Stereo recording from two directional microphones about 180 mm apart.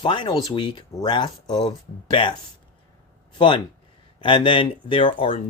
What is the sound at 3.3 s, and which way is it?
Speech, 25° left (ahead or behind).